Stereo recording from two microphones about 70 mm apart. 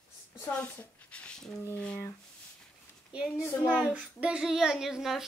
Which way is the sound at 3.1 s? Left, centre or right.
Centre.